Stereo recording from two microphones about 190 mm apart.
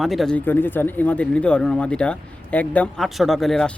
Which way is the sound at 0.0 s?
Centre (ahead or behind).